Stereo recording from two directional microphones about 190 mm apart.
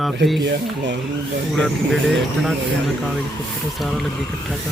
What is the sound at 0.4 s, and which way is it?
Speech, 70° right (ahead or behind).